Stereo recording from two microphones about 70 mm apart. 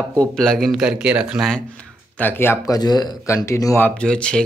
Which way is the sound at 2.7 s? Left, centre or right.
Left.